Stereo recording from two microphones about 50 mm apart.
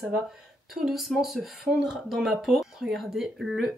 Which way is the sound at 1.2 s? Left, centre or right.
Centre.